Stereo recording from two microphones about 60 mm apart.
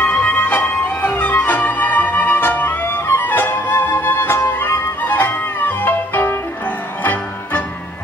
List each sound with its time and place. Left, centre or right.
0.0 s music: left